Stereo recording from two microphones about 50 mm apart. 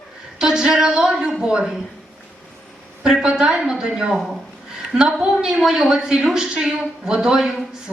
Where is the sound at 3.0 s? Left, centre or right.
Centre.